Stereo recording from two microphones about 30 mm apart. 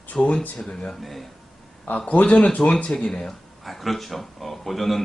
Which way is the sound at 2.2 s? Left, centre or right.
Left.